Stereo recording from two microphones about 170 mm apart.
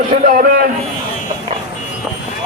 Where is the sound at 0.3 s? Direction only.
55° right (ahead or behind).